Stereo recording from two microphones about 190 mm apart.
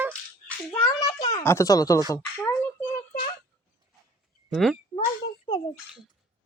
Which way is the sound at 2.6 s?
10° left (ahead or behind).